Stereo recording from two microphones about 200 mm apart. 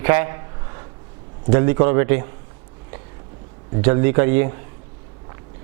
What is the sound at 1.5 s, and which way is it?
Speech, 15° right (ahead or behind).